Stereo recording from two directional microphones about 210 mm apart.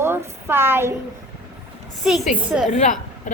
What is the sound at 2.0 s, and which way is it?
Speech, 5° right (ahead or behind).